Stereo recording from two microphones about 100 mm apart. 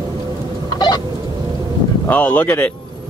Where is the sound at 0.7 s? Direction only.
45° left (ahead or behind).